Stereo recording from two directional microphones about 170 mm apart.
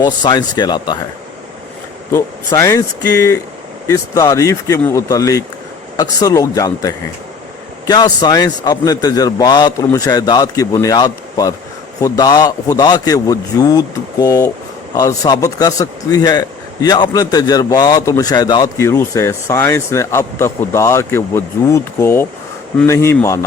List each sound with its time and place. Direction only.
0.0 s a man's voice: 25° left (ahead or behind)
2.1 s a man's voice: 20° left (ahead or behind)